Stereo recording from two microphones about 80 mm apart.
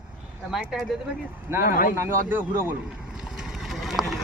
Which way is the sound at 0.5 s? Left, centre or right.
Centre.